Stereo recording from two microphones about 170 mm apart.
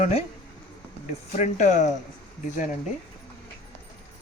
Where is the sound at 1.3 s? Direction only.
45° left (ahead or behind).